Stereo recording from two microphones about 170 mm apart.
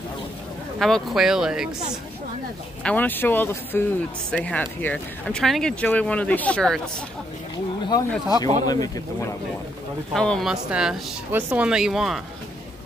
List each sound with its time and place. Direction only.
0.7 s speech: centre (ahead or behind)
2.8 s speech: 10° left (ahead or behind)
7.9 s speech: 25° left (ahead or behind)
10.1 s speech: 5° left (ahead or behind)